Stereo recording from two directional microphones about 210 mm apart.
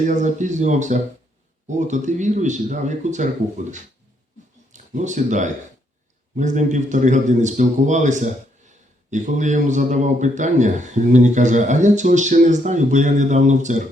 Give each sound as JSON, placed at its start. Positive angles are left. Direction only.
{"t": 0.0, "sound": "a man's voice", "side_deg": -35}